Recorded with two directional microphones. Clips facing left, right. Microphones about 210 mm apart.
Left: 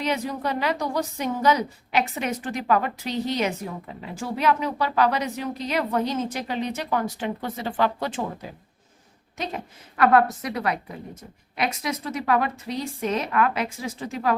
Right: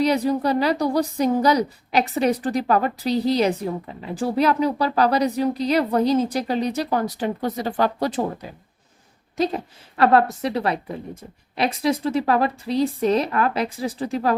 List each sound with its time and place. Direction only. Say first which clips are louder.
0.0 s a woman's voice: right 7 dB; 35° right (ahead or behind)
10.0 s a woman's voice: right 2 dB; 30° right (ahead or behind)